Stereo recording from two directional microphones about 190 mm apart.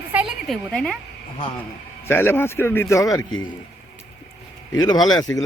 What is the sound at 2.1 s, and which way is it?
A man's voice, 10° left (ahead or behind).